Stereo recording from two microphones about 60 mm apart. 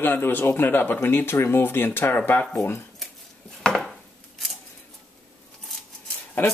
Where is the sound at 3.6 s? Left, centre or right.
Centre.